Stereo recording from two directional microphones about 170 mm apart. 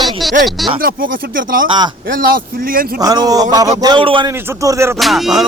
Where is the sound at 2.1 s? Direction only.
60° right (ahead or behind).